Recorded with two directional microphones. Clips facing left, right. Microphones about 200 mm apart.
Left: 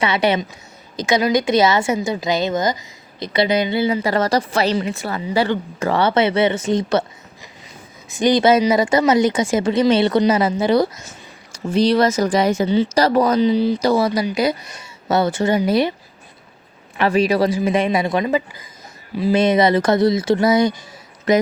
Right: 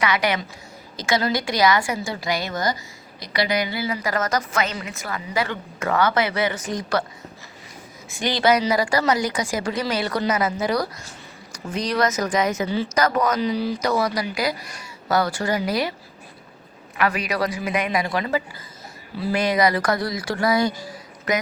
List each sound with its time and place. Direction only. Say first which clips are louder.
0.0 s a woman's voice: left 5 dB; 25° left (ahead or behind)
8.1 s a woman's voice: left 6 dB; 20° left (ahead or behind)
17.0 s a woman's voice: left 7 dB; 25° left (ahead or behind)